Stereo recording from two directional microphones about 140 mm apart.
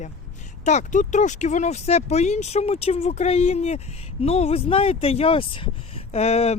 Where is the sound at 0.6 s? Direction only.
60° left (ahead or behind).